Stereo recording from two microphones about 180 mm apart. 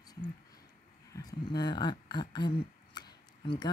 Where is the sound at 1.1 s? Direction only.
20° left (ahead or behind).